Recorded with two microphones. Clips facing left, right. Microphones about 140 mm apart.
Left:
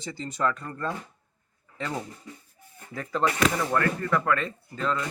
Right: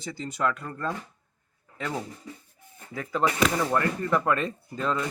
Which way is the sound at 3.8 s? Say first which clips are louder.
Even; 20° right (ahead or behind).